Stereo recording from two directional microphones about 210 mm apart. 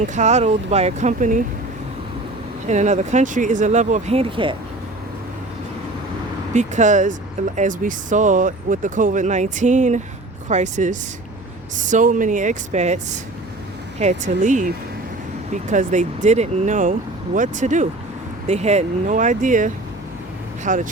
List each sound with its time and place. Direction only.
0.1 s speech: 35° right (ahead or behind)
2.6 s speech: 35° right (ahead or behind)
6.5 s speech: 35° right (ahead or behind)